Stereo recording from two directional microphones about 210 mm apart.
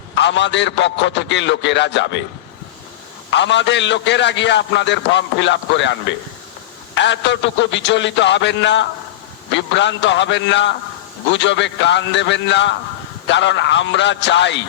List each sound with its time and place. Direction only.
0.2 s a man's voice: 55° left (ahead or behind)
3.3 s a man's voice: 60° left (ahead or behind)